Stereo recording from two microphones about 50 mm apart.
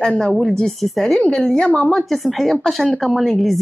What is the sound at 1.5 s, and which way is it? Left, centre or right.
Speech, centre.